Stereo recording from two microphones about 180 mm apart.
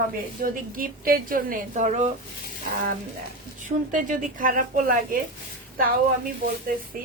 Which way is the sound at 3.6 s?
45° right (ahead or behind).